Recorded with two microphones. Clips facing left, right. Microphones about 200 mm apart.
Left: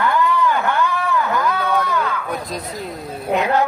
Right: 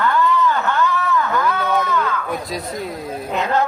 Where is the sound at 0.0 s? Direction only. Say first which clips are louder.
Even; 10° left (ahead or behind).